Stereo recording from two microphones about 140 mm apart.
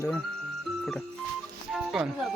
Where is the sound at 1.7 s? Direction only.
Centre (ahead or behind).